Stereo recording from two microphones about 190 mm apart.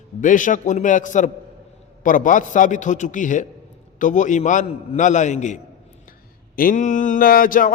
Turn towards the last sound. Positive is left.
turn(degrees=45)  # may be behind; listen again after turning